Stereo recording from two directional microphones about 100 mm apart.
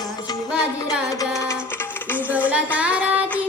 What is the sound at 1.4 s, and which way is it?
Music, 25° left (ahead or behind).